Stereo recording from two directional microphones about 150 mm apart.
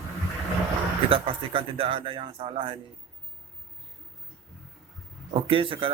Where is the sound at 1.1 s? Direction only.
40° right (ahead or behind).